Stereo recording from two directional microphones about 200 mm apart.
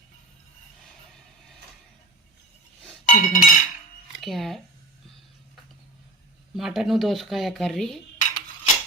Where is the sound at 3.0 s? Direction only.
40° left (ahead or behind).